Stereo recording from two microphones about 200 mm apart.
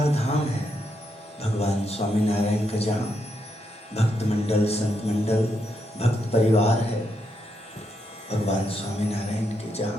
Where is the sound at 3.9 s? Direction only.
30° left (ahead or behind).